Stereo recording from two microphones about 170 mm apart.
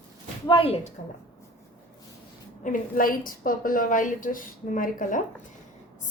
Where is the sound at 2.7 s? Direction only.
55° left (ahead or behind).